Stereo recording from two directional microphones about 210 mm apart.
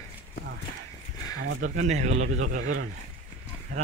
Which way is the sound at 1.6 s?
35° right (ahead or behind).